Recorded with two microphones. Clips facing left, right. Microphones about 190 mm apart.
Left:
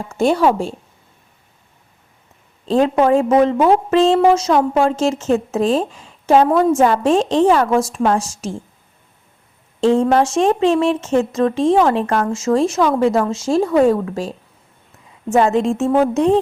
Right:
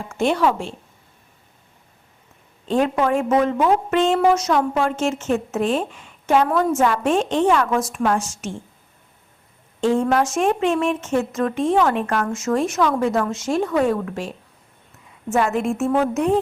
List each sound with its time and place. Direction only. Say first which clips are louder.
0.2 s a woman's voice: left 4 dB; 35° left (ahead or behind)
2.6 s a woman's voice: left 5 dB; 30° left (ahead or behind)
9.8 s a woman's voice: left 4 dB; 30° left (ahead or behind)